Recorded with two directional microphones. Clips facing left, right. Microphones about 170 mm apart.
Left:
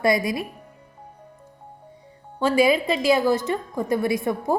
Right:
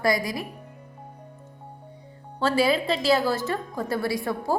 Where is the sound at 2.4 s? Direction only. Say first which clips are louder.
Left 3 dB; 15° left (ahead or behind).